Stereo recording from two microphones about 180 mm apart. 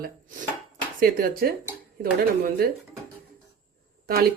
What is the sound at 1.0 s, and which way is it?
Speech, 55° right (ahead or behind).